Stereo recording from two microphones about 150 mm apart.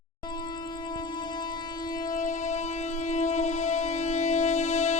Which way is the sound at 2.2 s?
55° left (ahead or behind).